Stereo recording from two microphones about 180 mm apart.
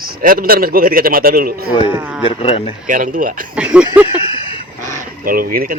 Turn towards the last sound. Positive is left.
turn(degrees=-55)  # may be behind; listen again after turning